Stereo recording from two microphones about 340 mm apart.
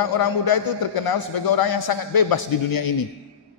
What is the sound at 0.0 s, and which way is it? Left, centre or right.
A man's voice, left.